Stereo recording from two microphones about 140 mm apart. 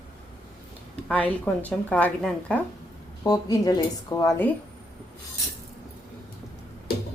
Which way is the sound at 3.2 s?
25° left (ahead or behind).